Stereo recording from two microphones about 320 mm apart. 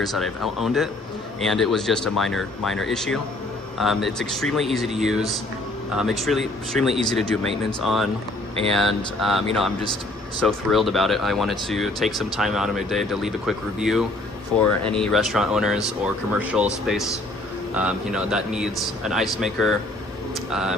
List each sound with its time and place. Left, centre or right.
0.0 s speech: centre